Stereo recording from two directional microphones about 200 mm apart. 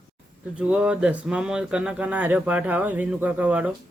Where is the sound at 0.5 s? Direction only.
5° right (ahead or behind).